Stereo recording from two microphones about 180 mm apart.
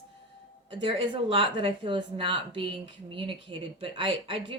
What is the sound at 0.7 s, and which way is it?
Speech, 30° right (ahead or behind).